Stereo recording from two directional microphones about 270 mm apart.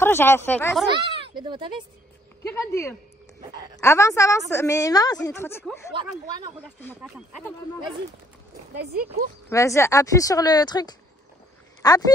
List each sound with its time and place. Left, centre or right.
0.0 s a woman's voice: centre
0.9 s speech: centre
2.5 s a woman's voice: centre
7.0 s speech: centre
9.5 s a woman's voice: centre